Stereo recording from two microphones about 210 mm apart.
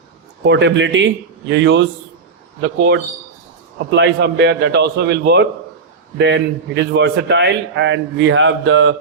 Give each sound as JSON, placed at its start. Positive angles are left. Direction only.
{"t": 0.4, "sound": "a man's voice", "side_deg": -55}